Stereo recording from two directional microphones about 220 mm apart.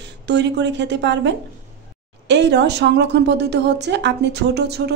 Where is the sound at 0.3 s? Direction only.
50° right (ahead or behind).